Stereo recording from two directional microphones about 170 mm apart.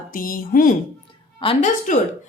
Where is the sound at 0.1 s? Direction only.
55° left (ahead or behind).